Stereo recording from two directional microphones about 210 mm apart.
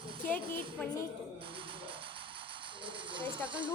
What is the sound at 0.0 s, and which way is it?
Music, 25° right (ahead or behind).